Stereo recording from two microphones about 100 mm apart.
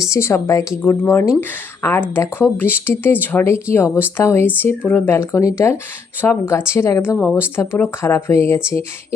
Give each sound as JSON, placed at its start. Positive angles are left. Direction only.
{"t": 0.0, "sound": "speech", "side_deg": 30}
{"t": 5.1, "sound": "speech", "side_deg": 30}